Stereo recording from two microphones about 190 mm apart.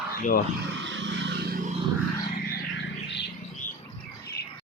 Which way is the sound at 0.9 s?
75° right (ahead or behind).